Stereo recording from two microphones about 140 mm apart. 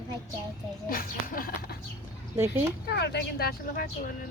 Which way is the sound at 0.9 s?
85° left.